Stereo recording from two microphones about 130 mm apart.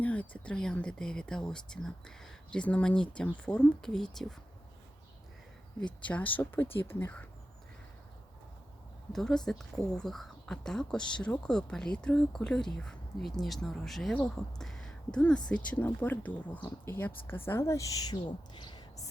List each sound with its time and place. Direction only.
0.0 s speech: 10° left (ahead or behind)
6.1 s speech: 10° left (ahead or behind)
9.1 s speech: 5° left (ahead or behind); by 18.9 s 35° left (ahead or behind)